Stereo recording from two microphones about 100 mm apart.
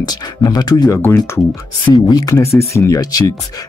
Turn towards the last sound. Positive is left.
turn(degrees=35)  # may be behind; listen again after turning